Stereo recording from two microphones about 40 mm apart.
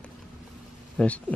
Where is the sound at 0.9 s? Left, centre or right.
Left.